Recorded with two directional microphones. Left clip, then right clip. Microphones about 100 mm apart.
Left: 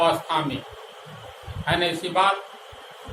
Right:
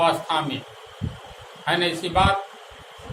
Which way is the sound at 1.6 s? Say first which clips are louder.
Right 1 dB; 70° right (ahead or behind).